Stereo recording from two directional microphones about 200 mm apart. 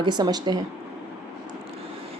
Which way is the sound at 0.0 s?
20° right (ahead or behind).